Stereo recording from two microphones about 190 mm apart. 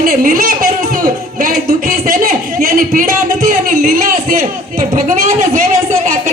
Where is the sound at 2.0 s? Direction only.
50° right (ahead or behind).